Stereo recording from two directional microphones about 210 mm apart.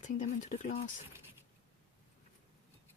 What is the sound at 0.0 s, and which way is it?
Speech, 35° left (ahead or behind).